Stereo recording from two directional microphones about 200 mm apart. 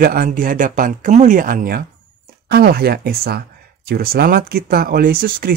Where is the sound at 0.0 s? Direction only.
45° right (ahead or behind).